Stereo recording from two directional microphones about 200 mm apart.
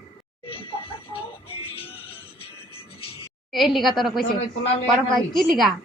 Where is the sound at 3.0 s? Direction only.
25° left (ahead or behind).